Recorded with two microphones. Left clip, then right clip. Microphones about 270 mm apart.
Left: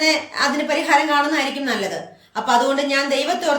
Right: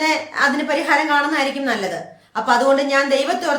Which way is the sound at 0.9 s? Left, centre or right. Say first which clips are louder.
Even; centre.